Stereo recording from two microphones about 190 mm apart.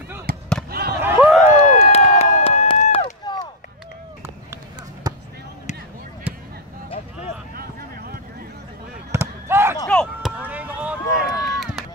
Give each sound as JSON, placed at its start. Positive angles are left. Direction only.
{"t": 0.7, "sound": "a sound", "side_deg": -55}
{"t": 1.0, "sound": "run", "side_deg": -10}
{"t": 1.5, "sound": "run", "side_deg": 40}
{"t": 3.3, "sound": "run", "side_deg": 20}
{"t": 5.1, "sound": "basketball bounce", "side_deg": -20}
{"t": 9.1, "sound": "fireworks", "side_deg": -15}
{"t": 9.8, "sound": "chop", "side_deg": 5}
{"t": 10.4, "sound": "run", "side_deg": -10}